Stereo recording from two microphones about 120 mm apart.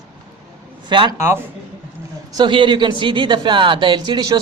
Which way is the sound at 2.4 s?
40° right (ahead or behind).